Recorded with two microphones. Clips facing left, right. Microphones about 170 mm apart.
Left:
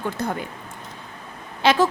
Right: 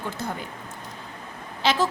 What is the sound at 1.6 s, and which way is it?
Speech, 55° left (ahead or behind).